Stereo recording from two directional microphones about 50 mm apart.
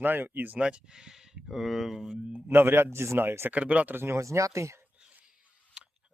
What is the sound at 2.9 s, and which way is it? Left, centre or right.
Speech, right.